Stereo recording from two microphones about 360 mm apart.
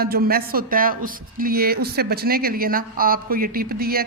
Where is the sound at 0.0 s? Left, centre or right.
Right.